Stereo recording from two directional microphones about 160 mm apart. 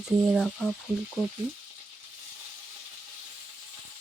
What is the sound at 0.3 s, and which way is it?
Speech, 5° left (ahead or behind).